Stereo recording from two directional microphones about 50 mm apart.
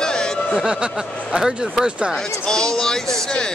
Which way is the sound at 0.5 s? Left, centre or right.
Centre.